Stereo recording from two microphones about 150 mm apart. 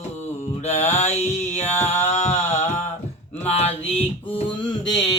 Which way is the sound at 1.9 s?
45° left (ahead or behind).